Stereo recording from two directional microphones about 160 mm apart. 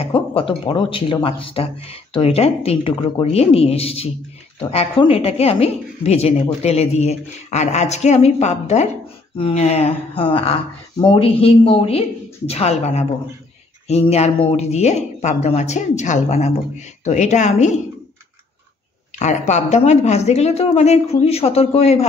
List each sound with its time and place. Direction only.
0.0 s speech: 35° left (ahead or behind)
19.1 s speech: 45° left (ahead or behind)